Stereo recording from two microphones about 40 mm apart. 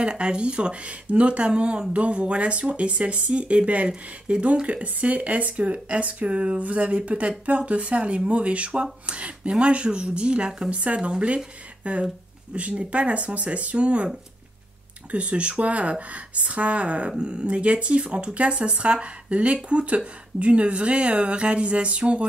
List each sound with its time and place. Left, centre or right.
0.1 s speech: right